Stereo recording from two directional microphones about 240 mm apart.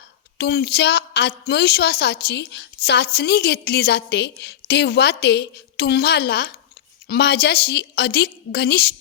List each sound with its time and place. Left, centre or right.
0.3 s a woman's voice: left